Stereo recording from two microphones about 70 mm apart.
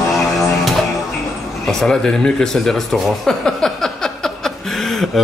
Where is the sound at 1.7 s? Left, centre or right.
Centre.